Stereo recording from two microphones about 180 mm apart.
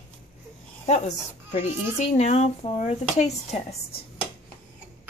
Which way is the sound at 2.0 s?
40° left (ahead or behind).